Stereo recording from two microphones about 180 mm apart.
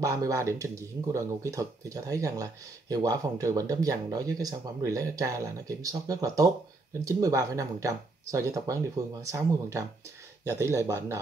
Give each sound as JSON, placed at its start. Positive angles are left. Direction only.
{"t": 0.0, "sound": "speech", "side_deg": -20}